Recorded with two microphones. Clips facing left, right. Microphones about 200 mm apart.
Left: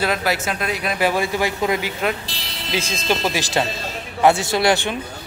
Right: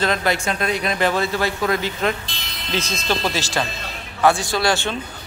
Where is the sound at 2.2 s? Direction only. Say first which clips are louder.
Left 2 dB; 35° left (ahead or behind).